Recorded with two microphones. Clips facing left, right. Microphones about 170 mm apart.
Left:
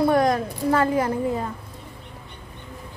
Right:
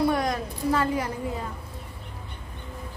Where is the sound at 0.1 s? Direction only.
50° left (ahead or behind).